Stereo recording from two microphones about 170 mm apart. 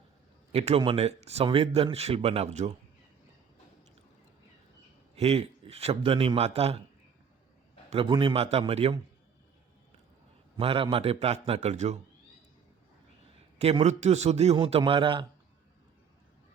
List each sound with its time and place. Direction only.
0.5 s a man's voice: 40° right (ahead or behind)
5.1 s a man's voice: 35° right (ahead or behind)
7.9 s a man's voice: 35° right (ahead or behind)
10.6 s a man's voice: 35° right (ahead or behind)
13.3 s a man's voice: 35° right (ahead or behind)